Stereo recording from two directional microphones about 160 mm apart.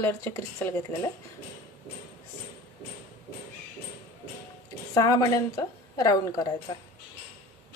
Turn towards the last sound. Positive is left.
turn(degrees=25)  # may be behind; listen again after turning